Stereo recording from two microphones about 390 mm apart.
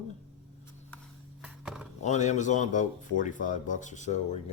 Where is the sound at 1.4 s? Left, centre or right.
Centre.